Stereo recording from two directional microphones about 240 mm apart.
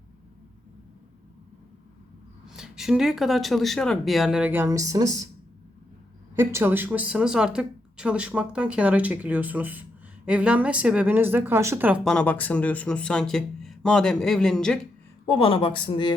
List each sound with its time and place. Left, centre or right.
2.5 s a woman's voice: centre
6.3 s a woman's voice: centre
15.3 s speech: left